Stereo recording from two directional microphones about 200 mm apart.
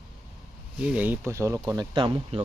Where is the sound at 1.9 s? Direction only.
25° right (ahead or behind).